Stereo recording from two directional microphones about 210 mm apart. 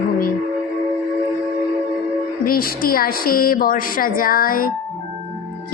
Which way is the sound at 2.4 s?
45° left (ahead or behind).